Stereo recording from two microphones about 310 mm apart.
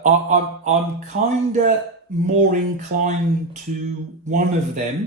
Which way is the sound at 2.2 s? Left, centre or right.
Right.